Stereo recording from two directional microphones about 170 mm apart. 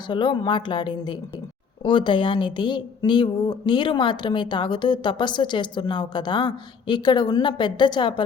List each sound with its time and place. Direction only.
0.1 s speech: 30° left (ahead or behind)